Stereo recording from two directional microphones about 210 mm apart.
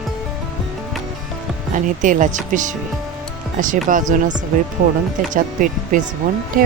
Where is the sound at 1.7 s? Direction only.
40° right (ahead or behind).